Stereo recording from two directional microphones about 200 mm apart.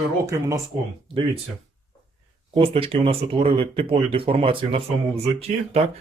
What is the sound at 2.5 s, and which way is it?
Speech, 25° right (ahead or behind).